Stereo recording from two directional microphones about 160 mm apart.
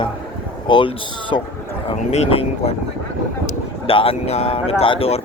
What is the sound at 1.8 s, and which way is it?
Speech, 40° left (ahead or behind).